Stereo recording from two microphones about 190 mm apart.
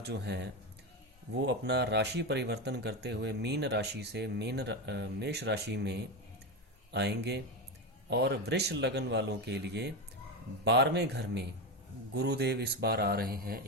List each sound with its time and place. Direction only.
0.0 s speech: 65° right (ahead or behind)